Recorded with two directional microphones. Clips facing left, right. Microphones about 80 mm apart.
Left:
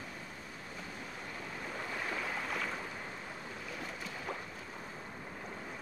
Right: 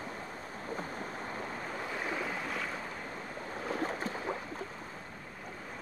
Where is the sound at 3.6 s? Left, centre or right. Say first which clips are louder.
Right 11 dB; right.